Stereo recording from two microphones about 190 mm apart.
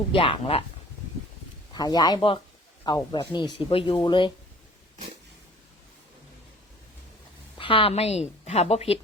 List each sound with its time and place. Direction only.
0.1 s speech: 30° left (ahead or behind)
1.7 s speech: 20° left (ahead or behind)
7.6 s a woman's voice: 30° left (ahead or behind)